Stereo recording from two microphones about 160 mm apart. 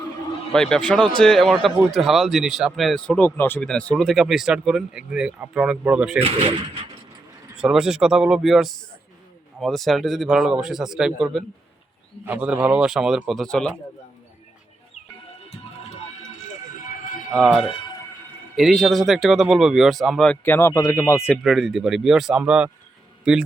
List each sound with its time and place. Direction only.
0.5 s speech: 5° left (ahead or behind)
6.2 s speech: 35° right (ahead or behind)
7.5 s speech: 5° right (ahead or behind)
16.8 s a sound: 55° left (ahead or behind)
17.3 s speech: centre (ahead or behind); by 21.3 s 15° left (ahead or behind)
21.4 s speech: centre (ahead or behind)